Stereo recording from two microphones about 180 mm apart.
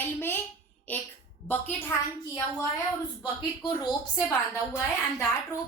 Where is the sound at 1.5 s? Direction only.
10° left (ahead or behind).